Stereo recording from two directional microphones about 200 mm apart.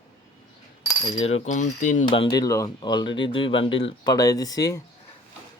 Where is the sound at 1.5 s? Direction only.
35° left (ahead or behind).